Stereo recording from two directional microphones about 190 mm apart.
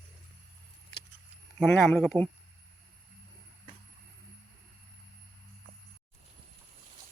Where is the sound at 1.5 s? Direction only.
5° left (ahead or behind).